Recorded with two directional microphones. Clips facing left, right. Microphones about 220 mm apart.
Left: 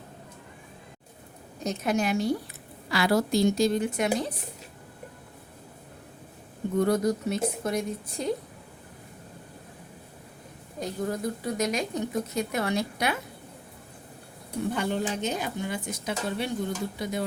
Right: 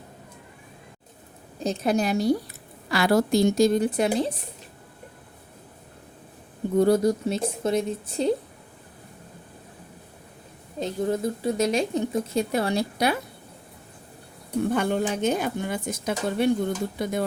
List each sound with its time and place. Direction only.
1.5 s a woman's voice: 30° right (ahead or behind)
2.9 s speech: 50° right (ahead or behind)
3.8 s a woman's voice: 35° right (ahead or behind)
6.7 s speech: 30° right (ahead or behind)
10.8 s speech: 25° right (ahead or behind)
14.7 s speech: 50° right (ahead or behind)